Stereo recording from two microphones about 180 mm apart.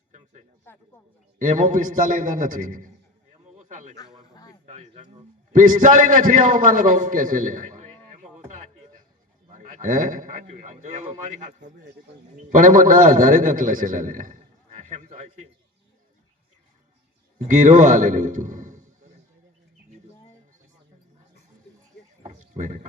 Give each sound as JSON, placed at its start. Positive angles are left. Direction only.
{"t": 1.4, "sound": "a man's voice", "side_deg": -45}
{"t": 17.3, "sound": "a man's voice", "side_deg": -45}
{"t": 22.2, "sound": "a sound", "side_deg": -45}